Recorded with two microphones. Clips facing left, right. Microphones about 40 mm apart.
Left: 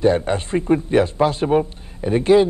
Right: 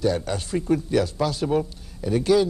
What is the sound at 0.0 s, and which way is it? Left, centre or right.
Speech, left.